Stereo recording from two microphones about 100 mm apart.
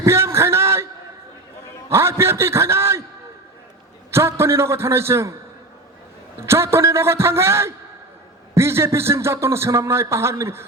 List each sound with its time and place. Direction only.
0.0 s a sound: 25° right (ahead or behind)
1.9 s a man's voice: 25° right (ahead or behind)
4.1 s a man's voice: 25° right (ahead or behind)
6.4 s a man's voice: 25° right (ahead or behind)